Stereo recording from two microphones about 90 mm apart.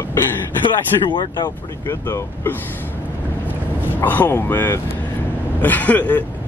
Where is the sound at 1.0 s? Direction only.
55° left (ahead or behind).